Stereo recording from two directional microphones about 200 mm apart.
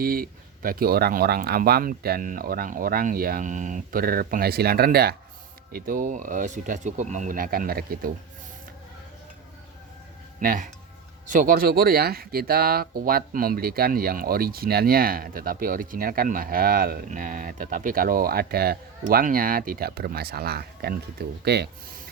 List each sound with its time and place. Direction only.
0.0 s speech: 45° right (ahead or behind)
10.4 s speech: 45° right (ahead or behind)